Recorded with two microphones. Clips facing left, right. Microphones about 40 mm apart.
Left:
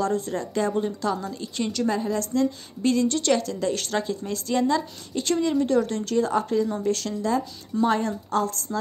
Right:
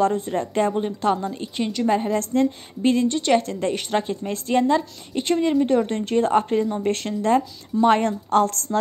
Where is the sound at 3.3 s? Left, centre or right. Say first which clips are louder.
Right 3 dB; right.